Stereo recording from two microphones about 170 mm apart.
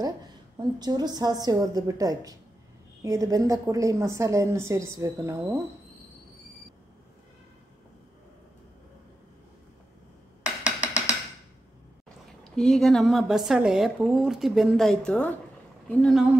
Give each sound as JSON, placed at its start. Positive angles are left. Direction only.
{"t": 0.6, "sound": "a woman's voice", "side_deg": -25}
{"t": 10.4, "sound": "a sound", "side_deg": -5}
{"t": 12.4, "sound": "a woman's voice", "side_deg": 5}